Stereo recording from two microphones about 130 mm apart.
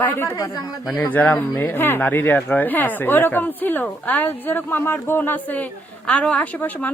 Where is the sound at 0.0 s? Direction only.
15° left (ahead or behind).